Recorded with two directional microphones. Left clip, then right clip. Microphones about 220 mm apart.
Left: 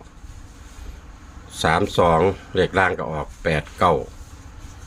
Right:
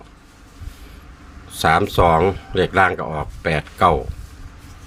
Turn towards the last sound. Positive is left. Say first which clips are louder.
# right 2 dB
turn(degrees=-10)  # may be behind; listen again after turning